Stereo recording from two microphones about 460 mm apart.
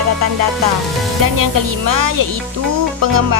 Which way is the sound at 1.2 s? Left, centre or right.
Right.